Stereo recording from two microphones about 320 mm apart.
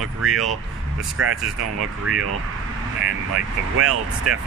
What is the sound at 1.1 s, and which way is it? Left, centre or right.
Speech, right.